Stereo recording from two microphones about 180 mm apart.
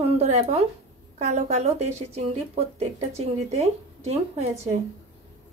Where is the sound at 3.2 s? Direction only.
35° right (ahead or behind).